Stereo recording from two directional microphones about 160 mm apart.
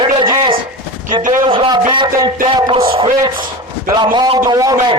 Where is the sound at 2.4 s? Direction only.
30° right (ahead or behind).